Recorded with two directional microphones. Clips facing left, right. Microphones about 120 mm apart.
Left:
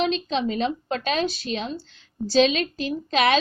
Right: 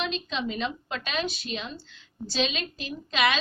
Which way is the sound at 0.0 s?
40° left (ahead or behind).